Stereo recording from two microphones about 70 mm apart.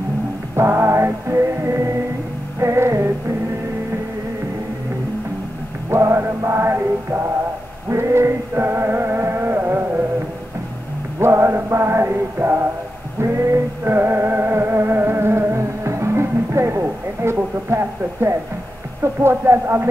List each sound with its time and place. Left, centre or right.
0.6 s music: right
5.9 s music: right
11.1 s male singing: right
13.2 s music: right